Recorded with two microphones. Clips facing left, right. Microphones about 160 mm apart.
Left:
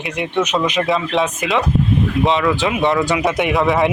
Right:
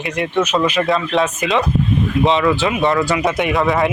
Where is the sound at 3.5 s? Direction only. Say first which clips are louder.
Left 1 dB; centre (ahead or behind).